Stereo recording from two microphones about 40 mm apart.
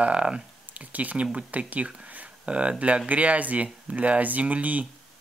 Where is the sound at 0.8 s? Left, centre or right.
Right.